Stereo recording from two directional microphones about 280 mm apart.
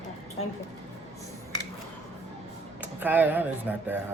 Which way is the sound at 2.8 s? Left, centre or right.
Centre.